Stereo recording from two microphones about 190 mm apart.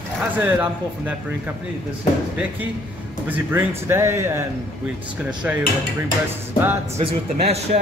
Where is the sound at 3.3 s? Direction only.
10° right (ahead or behind).